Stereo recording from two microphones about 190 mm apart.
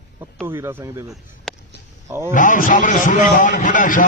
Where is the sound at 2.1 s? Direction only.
15° right (ahead or behind).